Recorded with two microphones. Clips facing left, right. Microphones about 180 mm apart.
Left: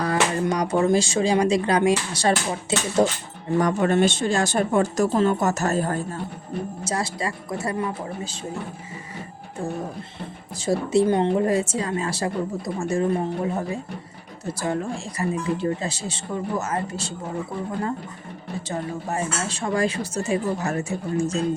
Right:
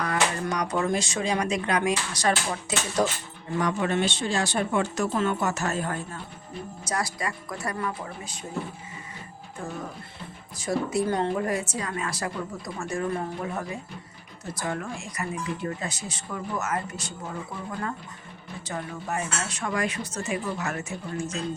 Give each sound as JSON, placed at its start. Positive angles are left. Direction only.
{"t": 0.0, "sound": "a woman's voice", "side_deg": 30}
{"t": 3.6, "sound": "speech", "side_deg": 45}
{"t": 6.8, "sound": "a woman's voice", "side_deg": 25}
{"t": 10.6, "sound": "a woman's voice", "side_deg": 25}
{"t": 18.7, "sound": "a woman's voice", "side_deg": 30}